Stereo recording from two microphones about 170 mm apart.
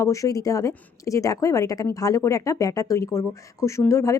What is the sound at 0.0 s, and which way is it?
A woman's voice, 20° left (ahead or behind).